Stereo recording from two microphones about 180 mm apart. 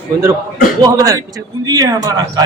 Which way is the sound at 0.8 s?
20° right (ahead or behind).